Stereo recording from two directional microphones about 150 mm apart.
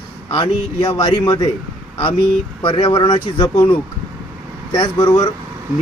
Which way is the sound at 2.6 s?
30° left (ahead or behind).